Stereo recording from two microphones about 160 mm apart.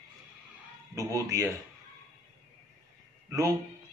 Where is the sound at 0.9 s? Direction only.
20° right (ahead or behind).